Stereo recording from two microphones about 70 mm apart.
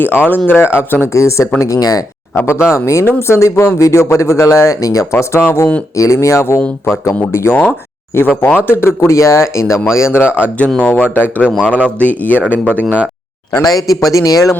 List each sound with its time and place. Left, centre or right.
0.0 s speech: left
1.1 s speech: left
2.5 s speech: left
5.3 s speech: left
6.0 s speech: left
8.5 s speech: left
9.0 s speech: left
10.8 s speech: centre
13.6 s speech: left